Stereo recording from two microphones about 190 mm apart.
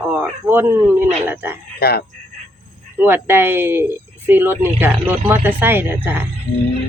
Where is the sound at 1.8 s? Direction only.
55° left (ahead or behind).